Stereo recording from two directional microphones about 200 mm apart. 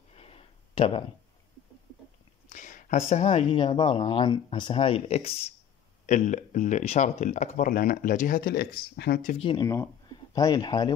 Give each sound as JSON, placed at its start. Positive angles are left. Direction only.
{"t": 0.1, "sound": "a sound", "side_deg": 30}
{"t": 2.5, "sound": "speech", "side_deg": 40}
{"t": 9.4, "sound": "speech", "side_deg": 20}